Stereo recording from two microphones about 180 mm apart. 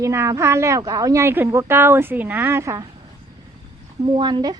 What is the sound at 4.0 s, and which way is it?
Speech, 25° right (ahead or behind).